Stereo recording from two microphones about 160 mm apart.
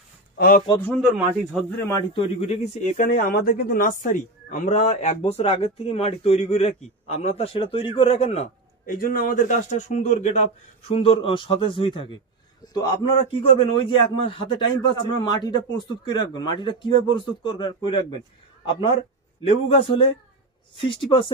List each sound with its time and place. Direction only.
0.4 s a man's voice: 65° left (ahead or behind)
0.7 s a man's voice: 5° left (ahead or behind)
2.1 s a man's voice: 40° left (ahead or behind); by 3.9 s 65° left (ahead or behind)
4.0 s speech: 50° left (ahead or behind)
8.8 s speech: 65° left (ahead or behind); by 10.1 s 50° left (ahead or behind)
10.9 s speech: 35° left (ahead or behind)
13.4 s a man's voice: 35° left (ahead or behind)